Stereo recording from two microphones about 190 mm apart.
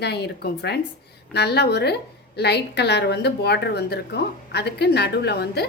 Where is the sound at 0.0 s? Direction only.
60° left (ahead or behind).